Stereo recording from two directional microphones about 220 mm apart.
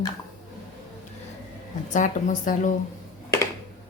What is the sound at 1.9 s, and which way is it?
Speech, 35° left (ahead or behind).